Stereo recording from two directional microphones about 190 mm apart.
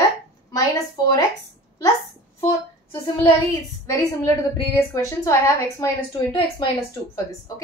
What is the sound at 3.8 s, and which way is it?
A woman's voice, 15° left (ahead or behind).